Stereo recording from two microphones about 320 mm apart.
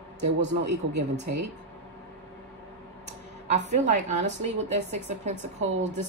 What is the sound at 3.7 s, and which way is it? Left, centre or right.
A woman's voice, right.